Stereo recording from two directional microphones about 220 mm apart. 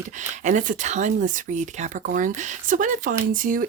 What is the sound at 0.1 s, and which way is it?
Speech, 35° right (ahead or behind).